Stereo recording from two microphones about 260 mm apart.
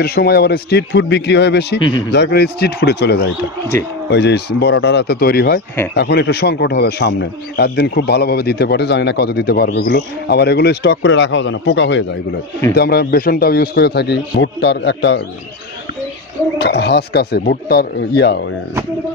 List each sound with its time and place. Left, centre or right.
0.0 s a man's voice: left
1.8 s speech: centre
2.1 s a man's voice: left
16.5 s a man's voice: left